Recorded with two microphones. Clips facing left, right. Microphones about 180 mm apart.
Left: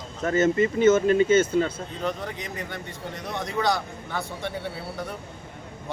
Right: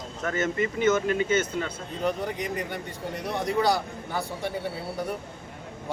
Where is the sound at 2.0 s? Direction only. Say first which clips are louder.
Right 3 dB; 10° right (ahead or behind).